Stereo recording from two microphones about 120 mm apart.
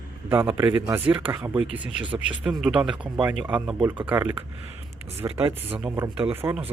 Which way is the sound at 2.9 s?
40° right (ahead or behind).